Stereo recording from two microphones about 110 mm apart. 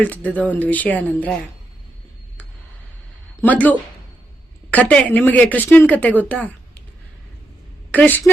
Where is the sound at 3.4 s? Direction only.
15° left (ahead or behind).